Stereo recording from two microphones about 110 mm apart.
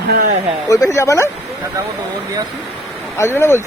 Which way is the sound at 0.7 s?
30° left (ahead or behind).